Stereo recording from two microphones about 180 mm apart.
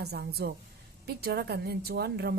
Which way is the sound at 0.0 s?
65° right (ahead or behind).